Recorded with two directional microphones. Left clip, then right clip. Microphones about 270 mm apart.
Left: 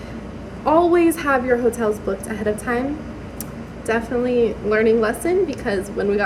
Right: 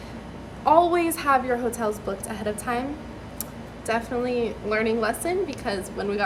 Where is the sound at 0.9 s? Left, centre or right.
Centre.